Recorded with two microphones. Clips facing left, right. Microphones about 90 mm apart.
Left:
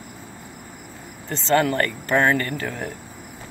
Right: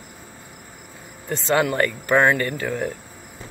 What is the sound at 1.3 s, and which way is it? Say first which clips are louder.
Speech: left 1 dB; 15° right (ahead or behind).